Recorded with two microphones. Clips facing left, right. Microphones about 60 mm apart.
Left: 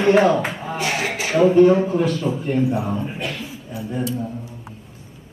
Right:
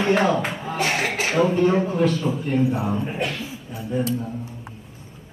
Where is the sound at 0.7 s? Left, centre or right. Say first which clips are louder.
Right 1 dB; right.